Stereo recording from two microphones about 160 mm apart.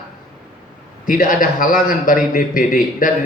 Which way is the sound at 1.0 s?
60° left (ahead or behind).